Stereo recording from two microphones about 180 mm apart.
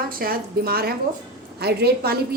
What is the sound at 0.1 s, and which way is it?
A woman's voice, 55° right (ahead or behind).